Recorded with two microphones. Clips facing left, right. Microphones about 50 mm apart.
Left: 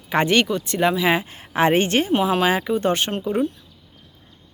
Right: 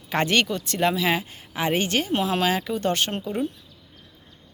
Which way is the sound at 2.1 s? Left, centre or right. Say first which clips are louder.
Left 3 dB; centre.